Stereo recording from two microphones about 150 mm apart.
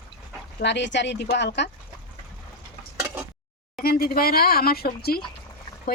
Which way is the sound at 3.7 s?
90° left.